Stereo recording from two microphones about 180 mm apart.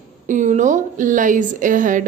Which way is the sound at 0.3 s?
45° right (ahead or behind).